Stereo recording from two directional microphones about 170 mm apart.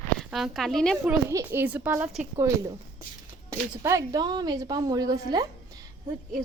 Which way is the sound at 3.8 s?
20° right (ahead or behind).